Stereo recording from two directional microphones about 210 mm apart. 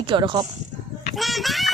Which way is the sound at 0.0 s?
25° right (ahead or behind).